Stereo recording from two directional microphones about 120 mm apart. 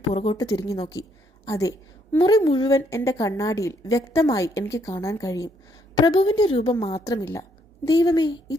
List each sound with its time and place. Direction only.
0.1 s a woman's voice: 40° left (ahead or behind)
0.4 s a woman's voice: 30° left (ahead or behind)
2.1 s a woman's voice: 40° left (ahead or behind)
2.7 s a woman's voice: 25° left (ahead or behind); by 7.0 s 50° left (ahead or behind)
7.0 s a woman's voice: 30° left (ahead or behind)